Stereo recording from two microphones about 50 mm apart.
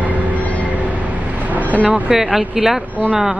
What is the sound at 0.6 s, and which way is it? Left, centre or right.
Train, right.